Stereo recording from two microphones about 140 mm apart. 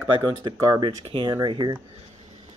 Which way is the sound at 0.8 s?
35° right (ahead or behind).